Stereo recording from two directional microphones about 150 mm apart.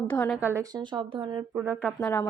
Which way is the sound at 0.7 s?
30° right (ahead or behind).